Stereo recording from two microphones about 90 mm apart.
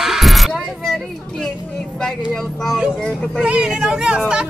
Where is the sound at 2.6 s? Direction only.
5° right (ahead or behind).